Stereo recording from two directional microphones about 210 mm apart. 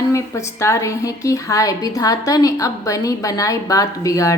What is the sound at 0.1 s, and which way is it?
A woman's voice, 15° left (ahead or behind).